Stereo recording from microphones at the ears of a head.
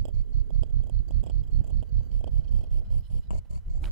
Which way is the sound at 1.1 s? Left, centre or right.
Right.